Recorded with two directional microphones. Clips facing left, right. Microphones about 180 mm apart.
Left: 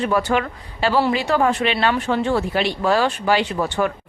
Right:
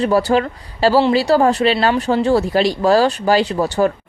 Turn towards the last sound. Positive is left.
turn(degrees=-35)  # may be behind; listen again after turning